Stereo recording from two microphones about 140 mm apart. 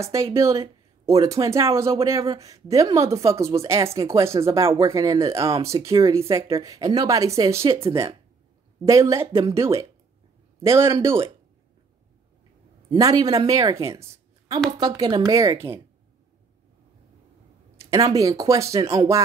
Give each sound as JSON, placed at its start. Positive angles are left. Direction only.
{"t": 0.0, "sound": "speech", "side_deg": -20}
{"t": 12.9, "sound": "speech", "side_deg": -25}
{"t": 17.8, "sound": "speech", "side_deg": -25}